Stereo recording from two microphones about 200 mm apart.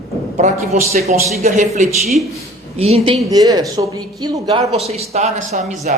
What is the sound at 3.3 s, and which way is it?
Speech, 20° right (ahead or behind).